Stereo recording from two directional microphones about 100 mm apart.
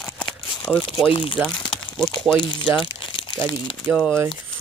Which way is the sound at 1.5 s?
50° left (ahead or behind).